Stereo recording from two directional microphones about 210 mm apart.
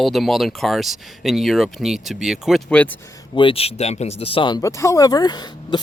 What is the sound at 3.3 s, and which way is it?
Speech, 25° left (ahead or behind).